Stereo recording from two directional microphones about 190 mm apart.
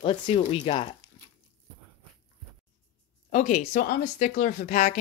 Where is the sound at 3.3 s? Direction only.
40° left (ahead or behind).